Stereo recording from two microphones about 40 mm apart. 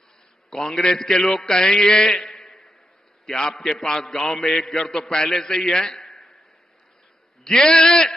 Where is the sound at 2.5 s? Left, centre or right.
Centre.